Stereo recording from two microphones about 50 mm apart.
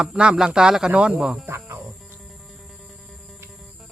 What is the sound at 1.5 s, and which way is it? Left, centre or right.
Music, right.